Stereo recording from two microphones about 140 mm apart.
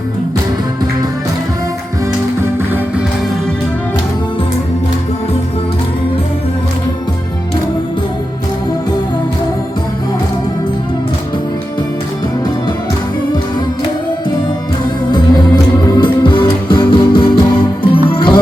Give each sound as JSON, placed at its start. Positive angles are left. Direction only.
{"t": 16.0, "sound": "music", "side_deg": 35}